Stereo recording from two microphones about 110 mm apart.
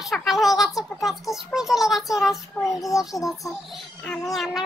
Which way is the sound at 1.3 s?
5° right (ahead or behind).